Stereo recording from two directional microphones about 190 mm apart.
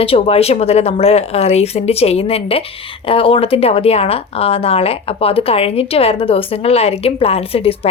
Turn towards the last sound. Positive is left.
turn(degrees=30)  # may be behind; listen again after turning